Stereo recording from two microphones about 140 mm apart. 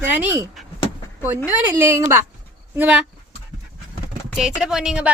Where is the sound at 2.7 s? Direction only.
10° right (ahead or behind).